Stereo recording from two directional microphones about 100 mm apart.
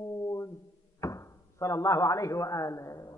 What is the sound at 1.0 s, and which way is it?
Speech, 30° left (ahead or behind).